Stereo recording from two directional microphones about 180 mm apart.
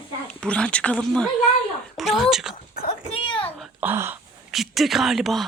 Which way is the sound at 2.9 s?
35° left (ahead or behind).